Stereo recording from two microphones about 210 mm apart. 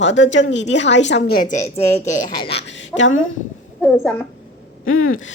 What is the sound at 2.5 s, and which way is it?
Speech, 55° left (ahead or behind).